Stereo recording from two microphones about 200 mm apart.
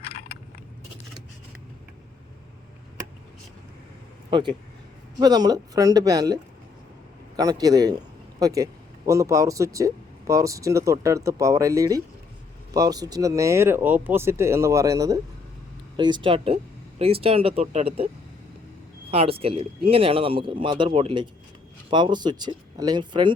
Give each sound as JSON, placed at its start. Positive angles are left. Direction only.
{"t": 4.3, "sound": "a man's voice", "side_deg": -25}
{"t": 19.1, "sound": "speech", "side_deg": -30}